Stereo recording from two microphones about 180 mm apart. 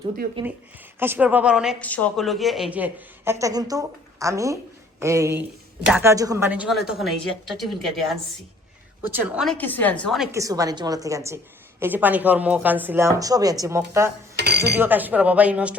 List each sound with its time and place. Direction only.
0.4 s a woman's voice: 25° right (ahead or behind)
0.9 s a woman's voice: 10° right (ahead or behind)
1.8 s a woman's voice: 10° left (ahead or behind)
9.6 s a woman's voice: 10° left (ahead or behind)
10.3 s a woman's voice: 20° right (ahead or behind)
14.3 s cutlery: 65° right (ahead or behind)
14.8 s a woman's voice: 10° right (ahead or behind)